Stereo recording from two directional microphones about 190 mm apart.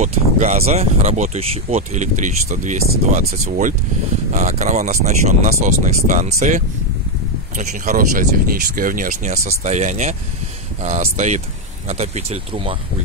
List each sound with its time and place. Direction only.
0.0 s speech: 35° right (ahead or behind)